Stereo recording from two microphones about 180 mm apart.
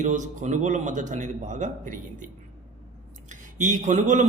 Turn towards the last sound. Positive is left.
turn(degrees=-45)  # may be behind; listen again after turning